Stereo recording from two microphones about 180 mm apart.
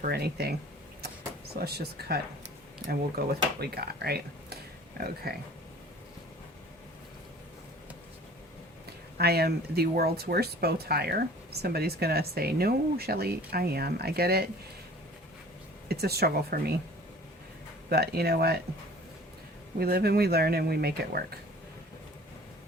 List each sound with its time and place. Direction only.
0.0 s speech: 60° right (ahead or behind)
1.6 s speech: 60° right (ahead or behind)
9.1 s speech: 60° right (ahead or behind)
15.9 s speech: 60° right (ahead or behind)
17.8 s speech: 60° right (ahead or behind)
19.8 s speech: 60° right (ahead or behind)